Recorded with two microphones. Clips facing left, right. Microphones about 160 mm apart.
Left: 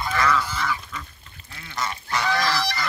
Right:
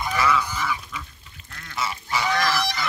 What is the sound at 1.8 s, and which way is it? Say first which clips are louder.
Goose: even; 5° right (ahead or behind).